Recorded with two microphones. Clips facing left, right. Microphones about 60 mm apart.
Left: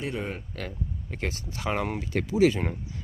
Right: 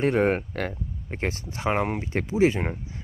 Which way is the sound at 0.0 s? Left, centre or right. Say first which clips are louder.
Right 11 dB; right.